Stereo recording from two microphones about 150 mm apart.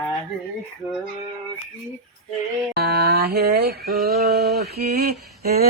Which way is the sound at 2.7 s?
90° right.